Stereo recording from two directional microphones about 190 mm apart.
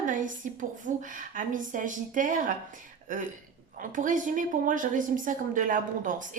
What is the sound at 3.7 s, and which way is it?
A woman's voice, 45° right (ahead or behind).